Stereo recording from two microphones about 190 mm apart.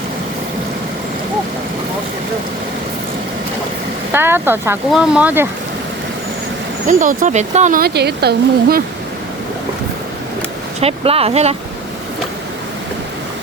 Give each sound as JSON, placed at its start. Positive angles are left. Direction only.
{"t": 4.1, "sound": "speech", "side_deg": -10}
{"t": 6.8, "sound": "speech", "side_deg": -45}
{"t": 10.8, "sound": "speech", "side_deg": -30}